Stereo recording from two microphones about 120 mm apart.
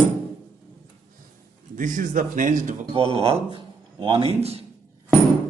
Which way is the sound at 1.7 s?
90° right.